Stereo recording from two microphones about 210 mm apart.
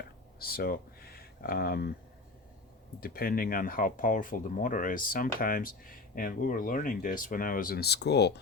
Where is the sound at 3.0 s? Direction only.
45° left (ahead or behind).